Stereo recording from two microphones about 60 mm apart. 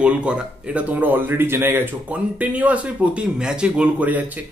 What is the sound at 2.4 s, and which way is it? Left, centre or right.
Speech, right.